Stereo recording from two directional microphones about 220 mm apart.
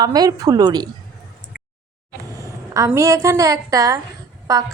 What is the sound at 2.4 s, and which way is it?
A woman's voice, 15° right (ahead or behind).